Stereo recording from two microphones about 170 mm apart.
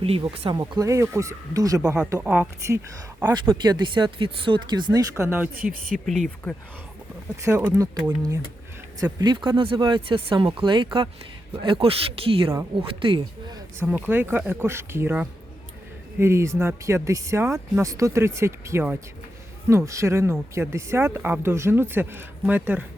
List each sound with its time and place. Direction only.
0.0 s speech: 35° right (ahead or behind)
0.5 s speech: 20° right (ahead or behind)
5.5 s speech: 55° right (ahead or behind)
6.1 s speech: centre (ahead or behind)
7.4 s speech: 15° right (ahead or behind)
13.7 s speech: 10° right (ahead or behind)